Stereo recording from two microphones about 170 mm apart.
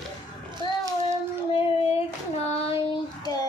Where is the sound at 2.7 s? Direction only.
25° left (ahead or behind).